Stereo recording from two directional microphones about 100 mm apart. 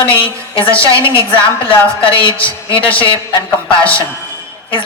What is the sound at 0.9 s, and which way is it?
Speech, 60° left (ahead or behind).